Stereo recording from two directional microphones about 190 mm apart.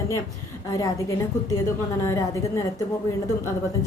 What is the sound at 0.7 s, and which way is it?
Speech, 20° left (ahead or behind).